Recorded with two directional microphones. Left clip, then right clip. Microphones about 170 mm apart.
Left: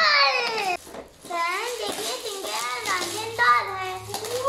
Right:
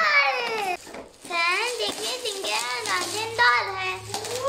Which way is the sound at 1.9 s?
15° left (ahead or behind).